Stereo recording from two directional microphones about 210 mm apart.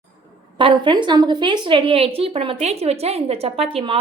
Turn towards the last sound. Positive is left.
turn(degrees=-25)  # may be behind; listen again after turning